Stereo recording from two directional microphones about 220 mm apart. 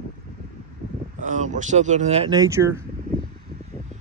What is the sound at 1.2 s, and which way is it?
Speech, 35° right (ahead or behind).